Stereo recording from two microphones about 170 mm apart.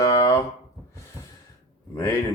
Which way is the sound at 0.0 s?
20° left (ahead or behind).